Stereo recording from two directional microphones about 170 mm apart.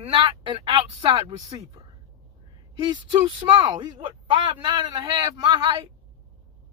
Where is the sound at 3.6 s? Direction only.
25° right (ahead or behind).